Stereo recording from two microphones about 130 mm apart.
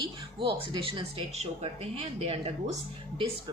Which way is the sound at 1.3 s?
55° right (ahead or behind).